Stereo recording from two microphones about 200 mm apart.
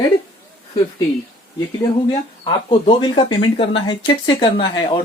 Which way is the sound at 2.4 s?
25° left (ahead or behind).